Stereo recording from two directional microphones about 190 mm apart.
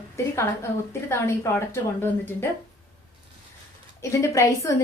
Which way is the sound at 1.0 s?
15° left (ahead or behind).